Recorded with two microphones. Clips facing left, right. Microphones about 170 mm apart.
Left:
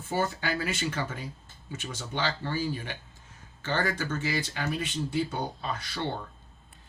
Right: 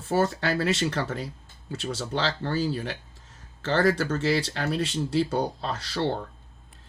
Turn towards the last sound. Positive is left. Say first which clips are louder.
# right 5 dB
turn(degrees=-80)